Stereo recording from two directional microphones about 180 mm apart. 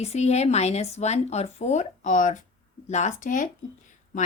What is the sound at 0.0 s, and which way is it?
A woman's voice, 35° left (ahead or behind).